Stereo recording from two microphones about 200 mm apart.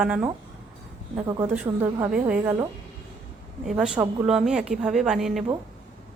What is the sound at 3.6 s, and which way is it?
A woman's voice, 5° right (ahead or behind).